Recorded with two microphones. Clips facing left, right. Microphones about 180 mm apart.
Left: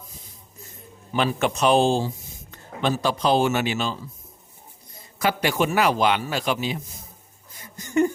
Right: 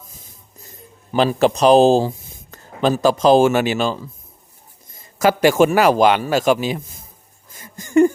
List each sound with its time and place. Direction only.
1.1 s speech: 35° right (ahead or behind)
5.2 s a man's voice: 45° right (ahead or behind)
7.6 s a sound: 50° right (ahead or behind)